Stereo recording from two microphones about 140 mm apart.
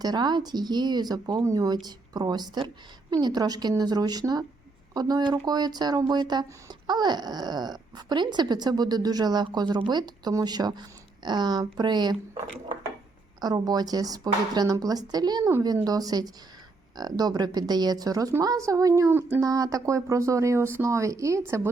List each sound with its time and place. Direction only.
0.0 s speech: 30° right (ahead or behind)
13.4 s speech: 30° right (ahead or behind)